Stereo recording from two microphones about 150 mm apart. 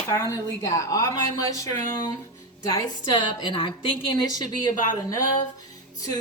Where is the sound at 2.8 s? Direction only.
30° left (ahead or behind).